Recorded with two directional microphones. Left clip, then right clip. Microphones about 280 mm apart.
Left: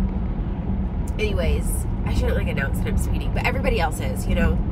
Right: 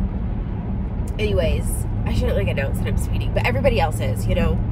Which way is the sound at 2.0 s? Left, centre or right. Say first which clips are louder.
Right 3 dB; centre.